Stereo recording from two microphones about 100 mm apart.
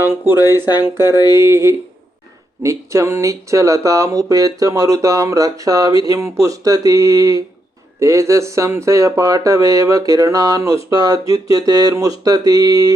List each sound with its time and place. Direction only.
0.0 s speech: 25° right (ahead or behind)
1.1 s a sound: 40° left (ahead or behind)
1.4 s speech: 30° right (ahead or behind)